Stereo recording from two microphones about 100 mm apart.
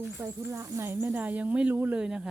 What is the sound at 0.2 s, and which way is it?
Speech, 25° right (ahead or behind).